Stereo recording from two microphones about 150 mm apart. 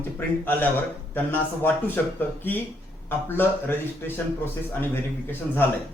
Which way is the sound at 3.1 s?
15° left (ahead or behind).